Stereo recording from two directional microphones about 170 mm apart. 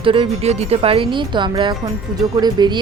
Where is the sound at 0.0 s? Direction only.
30° right (ahead or behind).